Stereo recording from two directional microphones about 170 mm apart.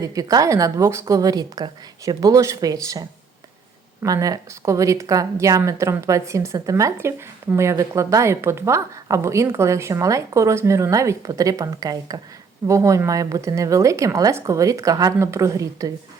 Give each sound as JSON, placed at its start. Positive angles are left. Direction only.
{"t": 0.0, "sound": "a woman's voice", "side_deg": -20}